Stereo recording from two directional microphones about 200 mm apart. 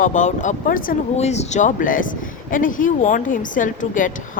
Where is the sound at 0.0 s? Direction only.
40° left (ahead or behind).